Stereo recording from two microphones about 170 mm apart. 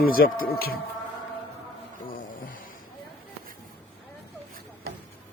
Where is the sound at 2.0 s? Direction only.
55° left (ahead or behind).